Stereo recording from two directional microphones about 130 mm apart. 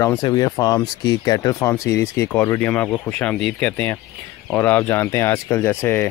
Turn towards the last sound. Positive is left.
turn(degrees=15)  # may be behind; listen again after turning